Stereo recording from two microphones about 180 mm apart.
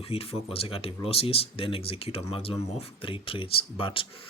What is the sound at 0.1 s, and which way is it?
Speech, 30° left (ahead or behind).